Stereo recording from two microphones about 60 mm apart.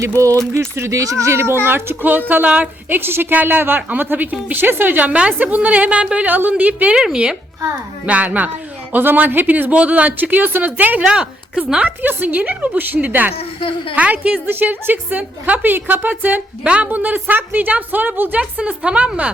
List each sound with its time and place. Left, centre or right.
0.0 s speech: right
1.6 s a woman's voice: right
6.9 s speech: centre
8.0 s speech: right
11.0 s a woman's voice: centre
11.9 s speech: right
14.4 s a woman's voice: right